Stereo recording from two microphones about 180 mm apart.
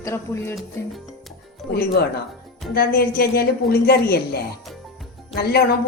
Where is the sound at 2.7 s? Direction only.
55° left (ahead or behind).